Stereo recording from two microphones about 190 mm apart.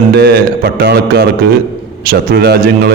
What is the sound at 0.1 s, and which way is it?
Speech, 55° right (ahead or behind).